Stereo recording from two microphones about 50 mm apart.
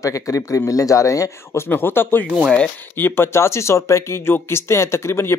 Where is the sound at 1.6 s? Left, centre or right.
Left.